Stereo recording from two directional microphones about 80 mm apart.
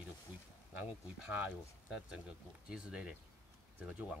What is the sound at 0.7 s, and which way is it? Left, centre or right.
Speech, centre.